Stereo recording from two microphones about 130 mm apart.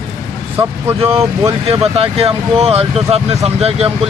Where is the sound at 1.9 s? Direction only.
50° right (ahead or behind).